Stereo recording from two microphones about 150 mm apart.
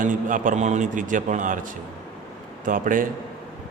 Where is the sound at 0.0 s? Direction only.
60° right (ahead or behind).